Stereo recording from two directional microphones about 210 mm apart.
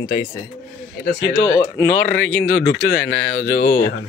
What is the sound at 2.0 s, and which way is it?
Speech, 60° left (ahead or behind).